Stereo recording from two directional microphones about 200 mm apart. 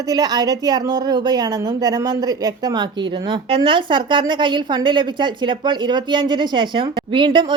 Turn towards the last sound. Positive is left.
turn(degrees=-25)  # may be behind; listen again after turning